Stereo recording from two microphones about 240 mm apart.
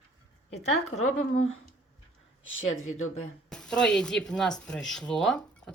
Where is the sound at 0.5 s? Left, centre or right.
Left.